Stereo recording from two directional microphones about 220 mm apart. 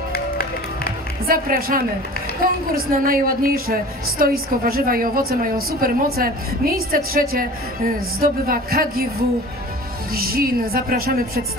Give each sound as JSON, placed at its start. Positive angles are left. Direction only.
{"t": 0.1, "sound": "music", "side_deg": 45}
{"t": 1.2, "sound": "a woman's voice", "side_deg": -40}
{"t": 10.1, "sound": "speech", "side_deg": -40}